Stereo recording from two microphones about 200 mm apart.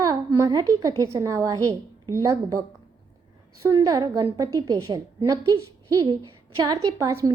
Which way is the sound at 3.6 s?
15° right (ahead or behind).